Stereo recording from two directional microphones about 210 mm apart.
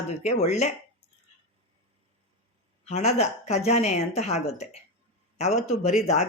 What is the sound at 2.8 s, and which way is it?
Speech, 30° left (ahead or behind).